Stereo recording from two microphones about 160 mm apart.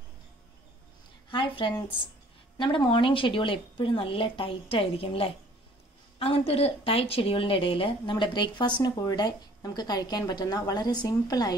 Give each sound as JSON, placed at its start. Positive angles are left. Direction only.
{"t": 1.6, "sound": "a woman's voice", "side_deg": 30}